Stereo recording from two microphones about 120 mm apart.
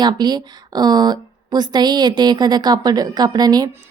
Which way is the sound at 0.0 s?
35° right (ahead or behind).